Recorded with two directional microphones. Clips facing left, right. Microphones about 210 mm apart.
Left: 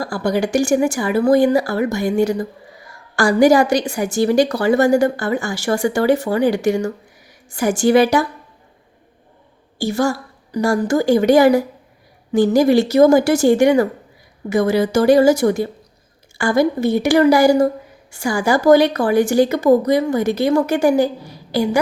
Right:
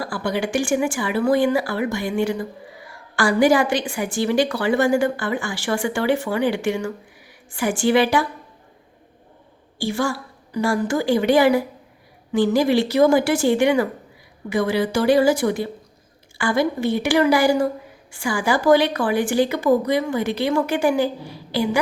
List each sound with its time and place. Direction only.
0.0 s a woman's voice: 40° left (ahead or behind)
9.7 s a woman's voice: 40° left (ahead or behind)